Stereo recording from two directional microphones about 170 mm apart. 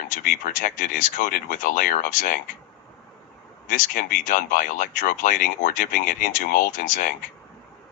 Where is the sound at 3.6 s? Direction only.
50° left (ahead or behind).